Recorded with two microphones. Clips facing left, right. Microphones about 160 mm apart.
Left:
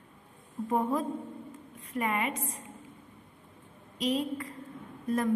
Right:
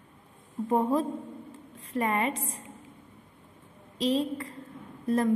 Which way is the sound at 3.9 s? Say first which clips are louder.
Right 3 dB; 30° right (ahead or behind).